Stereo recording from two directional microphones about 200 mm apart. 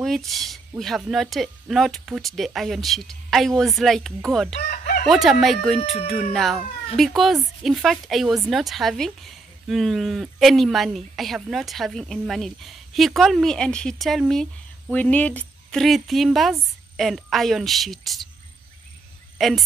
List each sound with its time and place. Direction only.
0.0 s speech: centre (ahead or behind)
4.6 s chicken: 45° left (ahead or behind)
5.0 s speech: centre (ahead or behind)
5.8 s speech: 30° left (ahead or behind)
6.3 s speech: centre (ahead or behind)
19.3 s cricket: centre (ahead or behind)